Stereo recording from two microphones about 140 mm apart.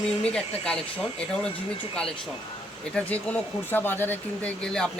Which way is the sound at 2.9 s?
10° left (ahead or behind).